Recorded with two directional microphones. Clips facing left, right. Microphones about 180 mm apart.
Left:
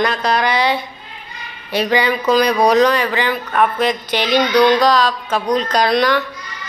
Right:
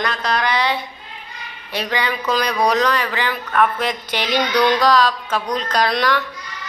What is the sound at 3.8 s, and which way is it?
Speech, 10° right (ahead or behind).